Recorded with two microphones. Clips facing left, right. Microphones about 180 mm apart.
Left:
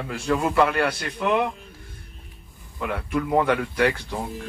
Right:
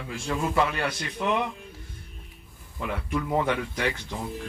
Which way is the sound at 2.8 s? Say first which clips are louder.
Left 4 dB; 55° left (ahead or behind).